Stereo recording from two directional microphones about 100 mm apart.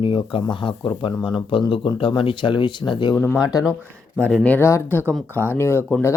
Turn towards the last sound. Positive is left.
turn(degrees=25)  # may be behind; listen again after turning